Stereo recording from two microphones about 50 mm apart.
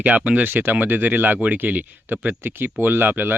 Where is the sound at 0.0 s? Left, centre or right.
Right.